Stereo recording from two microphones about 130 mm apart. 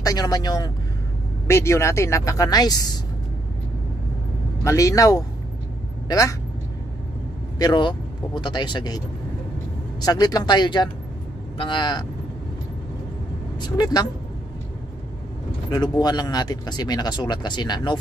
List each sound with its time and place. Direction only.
0.0 s speech: 30° left (ahead or behind)
1.5 s speech: 20° left (ahead or behind)
4.6 s speech: 25° left (ahead or behind)
7.5 s speech: 30° left (ahead or behind)
13.6 s speech: 30° left (ahead or behind)
15.7 s speech: 30° left (ahead or behind)